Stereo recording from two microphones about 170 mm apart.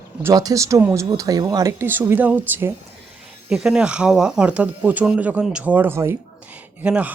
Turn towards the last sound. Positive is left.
turn(degrees=-10)  # may be behind; listen again after turning